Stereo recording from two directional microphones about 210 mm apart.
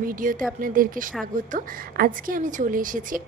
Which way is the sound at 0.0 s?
40° right (ahead or behind).